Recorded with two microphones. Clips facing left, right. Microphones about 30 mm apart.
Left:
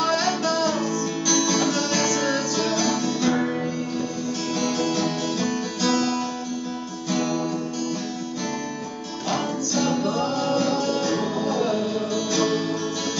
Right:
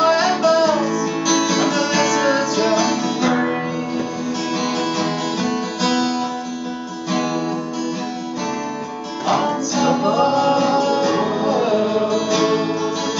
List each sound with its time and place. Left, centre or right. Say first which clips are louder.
0.0 s music: right 7 dB; centre
4.6 s music: right 1 dB; right
9.2 s music: right 7 dB; right